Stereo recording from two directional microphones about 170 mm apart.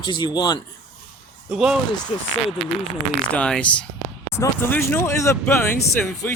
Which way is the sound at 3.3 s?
5° left (ahead or behind).